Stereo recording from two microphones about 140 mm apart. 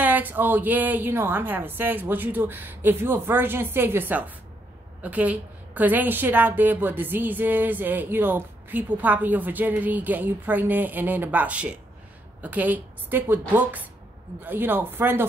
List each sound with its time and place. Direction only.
0.0 s a woman's voice: 10° right (ahead or behind)